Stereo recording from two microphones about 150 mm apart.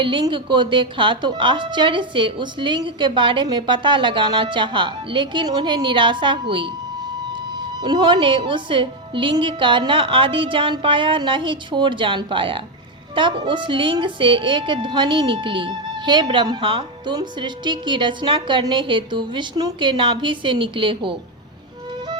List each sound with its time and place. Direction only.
0.0 s a woman's voice: 35° right (ahead or behind)